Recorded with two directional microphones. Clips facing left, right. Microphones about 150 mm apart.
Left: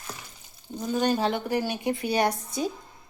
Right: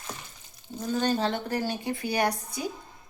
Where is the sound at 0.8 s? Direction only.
15° left (ahead or behind).